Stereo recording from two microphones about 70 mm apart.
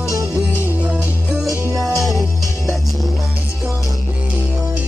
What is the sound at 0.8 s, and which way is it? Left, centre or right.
Music, centre.